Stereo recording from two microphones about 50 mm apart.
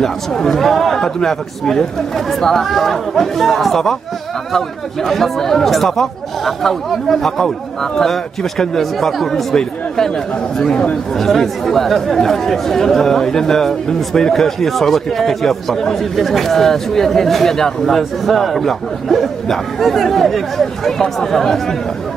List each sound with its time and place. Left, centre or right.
0.0 s speech: centre
11.1 s speech: centre